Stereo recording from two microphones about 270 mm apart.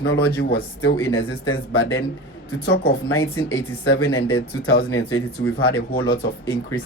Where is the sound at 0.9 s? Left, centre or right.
Centre.